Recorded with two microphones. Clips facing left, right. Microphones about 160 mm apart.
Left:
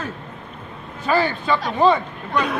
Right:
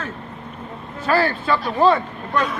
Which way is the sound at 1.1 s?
Centre (ahead or behind).